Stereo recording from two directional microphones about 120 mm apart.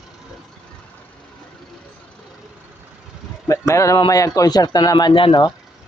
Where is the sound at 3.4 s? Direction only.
25° left (ahead or behind).